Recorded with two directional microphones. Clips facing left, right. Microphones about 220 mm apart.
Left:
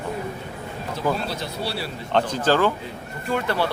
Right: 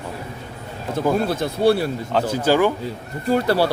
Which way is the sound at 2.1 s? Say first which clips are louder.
Right 2 dB; 10° right (ahead or behind).